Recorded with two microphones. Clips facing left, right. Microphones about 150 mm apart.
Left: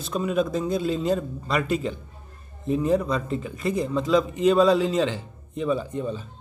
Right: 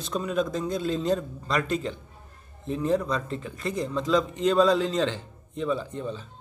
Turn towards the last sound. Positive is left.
turn(degrees=10)  # may be behind; listen again after turning